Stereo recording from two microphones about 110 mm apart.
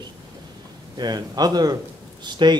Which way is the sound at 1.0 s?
40° right (ahead or behind).